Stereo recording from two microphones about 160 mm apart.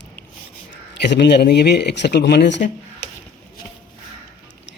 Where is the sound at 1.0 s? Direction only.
90° left.